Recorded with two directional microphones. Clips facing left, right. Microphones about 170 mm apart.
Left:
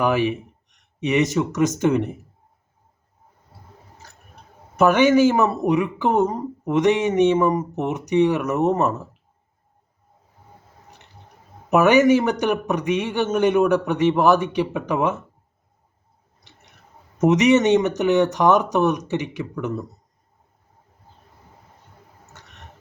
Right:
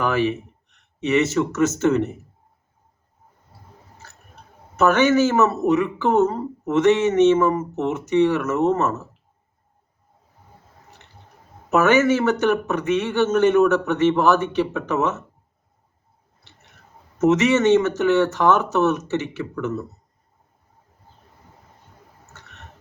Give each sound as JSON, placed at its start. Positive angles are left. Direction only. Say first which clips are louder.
{"t": 0.0, "sound": "speech", "louder": "left 1 dB", "side_deg": 15}
{"t": 4.8, "sound": "speech", "louder": "left 2 dB", "side_deg": 10}
{"t": 11.7, "sound": "speech", "louder": "left 2 dB", "side_deg": 15}
{"t": 17.2, "sound": "speech", "louder": "left 1 dB", "side_deg": 15}